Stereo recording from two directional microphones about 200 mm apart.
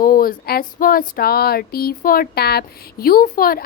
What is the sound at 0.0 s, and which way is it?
A woman's voice, 45° left (ahead or behind).